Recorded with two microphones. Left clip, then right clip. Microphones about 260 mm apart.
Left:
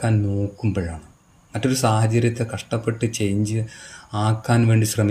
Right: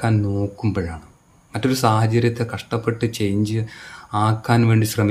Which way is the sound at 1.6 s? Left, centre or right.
Right.